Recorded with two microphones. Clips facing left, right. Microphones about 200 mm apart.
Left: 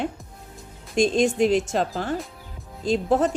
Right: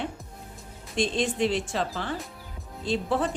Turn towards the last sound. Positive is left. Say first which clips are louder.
# left 6 dB
turn(degrees=45)  # may be behind; listen again after turning